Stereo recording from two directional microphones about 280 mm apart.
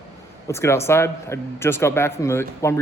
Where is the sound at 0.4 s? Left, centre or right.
Centre.